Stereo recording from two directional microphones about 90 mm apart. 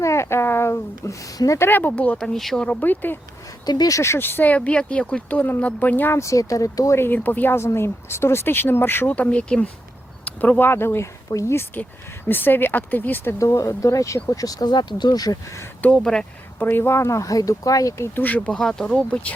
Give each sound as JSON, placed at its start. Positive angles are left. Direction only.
{"t": 0.0, "sound": "a sound", "side_deg": 30}
{"t": 1.4, "sound": "speech", "side_deg": 35}
{"t": 2.6, "sound": "speech", "side_deg": 20}
{"t": 3.7, "sound": "speech", "side_deg": 45}
{"t": 6.1, "sound": "speech", "side_deg": 35}
{"t": 13.4, "sound": "speech", "side_deg": 35}
{"t": 16.0, "sound": "speech", "side_deg": 10}
{"t": 16.6, "sound": "speech", "side_deg": 25}
{"t": 18.5, "sound": "speech", "side_deg": 5}